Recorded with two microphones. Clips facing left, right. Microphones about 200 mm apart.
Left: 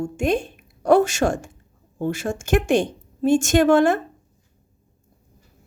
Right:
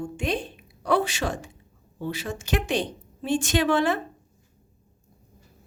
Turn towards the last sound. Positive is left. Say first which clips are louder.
# left 7 dB
turn(degrees=45)  # may be behind; listen again after turning